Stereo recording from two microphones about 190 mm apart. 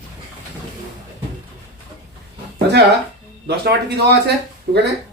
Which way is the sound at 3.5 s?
60° right (ahead or behind).